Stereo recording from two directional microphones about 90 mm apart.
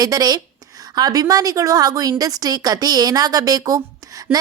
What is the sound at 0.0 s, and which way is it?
A woman's voice, 45° right (ahead or behind).